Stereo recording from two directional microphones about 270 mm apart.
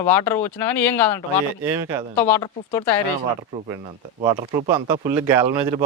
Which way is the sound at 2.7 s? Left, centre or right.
Centre.